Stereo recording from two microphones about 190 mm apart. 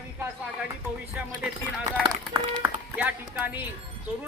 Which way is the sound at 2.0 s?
20° right (ahead or behind).